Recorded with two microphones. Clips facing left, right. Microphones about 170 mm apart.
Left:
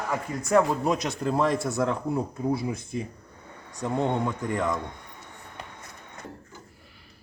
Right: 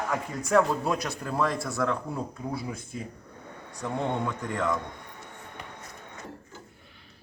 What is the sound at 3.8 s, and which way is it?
Speech, 20° left (ahead or behind).